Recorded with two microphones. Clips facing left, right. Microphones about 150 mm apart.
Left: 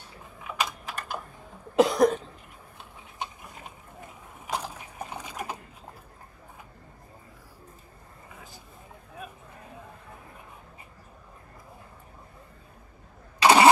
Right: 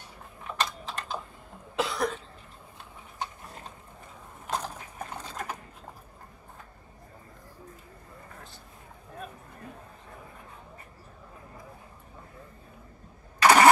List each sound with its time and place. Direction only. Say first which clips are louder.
0.4 s typing: even; 5° left (ahead or behind)
1.8 s cough: left 9 dB; 45° left (ahead or behind)
3.2 s a sound: even; 10° left (ahead or behind)
13.4 s engine starting: left 1 dB; 15° left (ahead or behind)